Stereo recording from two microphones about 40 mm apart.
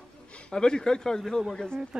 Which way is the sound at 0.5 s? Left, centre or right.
Centre.